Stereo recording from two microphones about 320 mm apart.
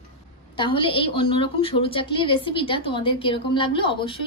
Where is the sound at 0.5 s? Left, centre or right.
Centre.